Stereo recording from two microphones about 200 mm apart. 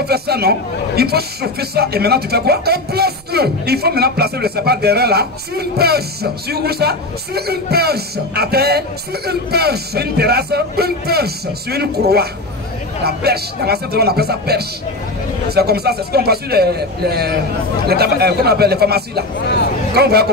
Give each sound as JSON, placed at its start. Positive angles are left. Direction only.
{"t": 0.0, "sound": "a man's voice", "side_deg": -55}